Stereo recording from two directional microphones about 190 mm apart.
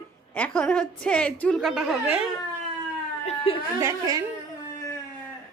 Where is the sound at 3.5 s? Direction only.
30° left (ahead or behind).